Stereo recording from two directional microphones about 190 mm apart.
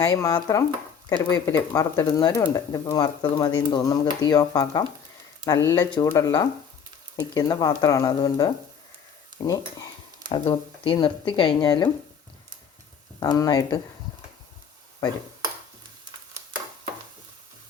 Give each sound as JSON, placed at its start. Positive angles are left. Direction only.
{"t": 0.0, "sound": "speech", "side_deg": 15}
{"t": 13.1, "sound": "speech", "side_deg": 20}